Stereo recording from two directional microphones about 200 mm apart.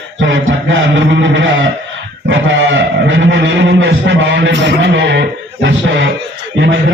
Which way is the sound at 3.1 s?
75° right (ahead or behind).